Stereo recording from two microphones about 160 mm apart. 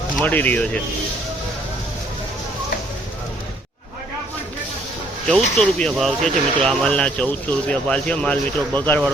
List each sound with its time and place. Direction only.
0.2 s speech: 10° left (ahead or behind)
5.3 s speech: centre (ahead or behind)